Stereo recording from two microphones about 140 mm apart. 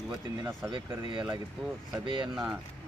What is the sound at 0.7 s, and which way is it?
Speech, 35° right (ahead or behind).